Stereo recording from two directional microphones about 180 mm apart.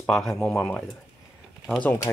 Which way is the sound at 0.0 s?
5° left (ahead or behind).